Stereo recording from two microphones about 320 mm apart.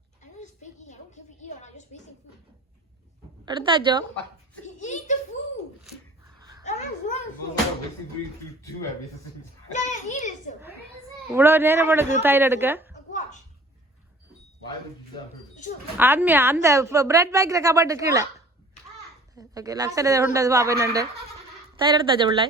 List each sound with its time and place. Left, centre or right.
0.2 s a sound: left
3.4 s a woman's voice: centre
4.8 s giggle: left
6.7 s speech: left
9.7 s a child's voice: left
11.3 s a woman's voice: centre
12.9 s a sound: left
16.0 s a woman's voice: centre